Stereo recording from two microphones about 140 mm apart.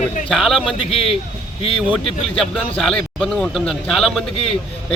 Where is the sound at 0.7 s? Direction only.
40° left (ahead or behind).